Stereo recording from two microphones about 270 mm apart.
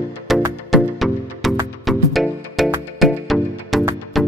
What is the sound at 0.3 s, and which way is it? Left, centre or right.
Music, centre.